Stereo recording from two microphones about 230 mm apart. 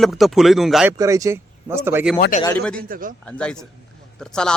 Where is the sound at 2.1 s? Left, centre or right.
Left.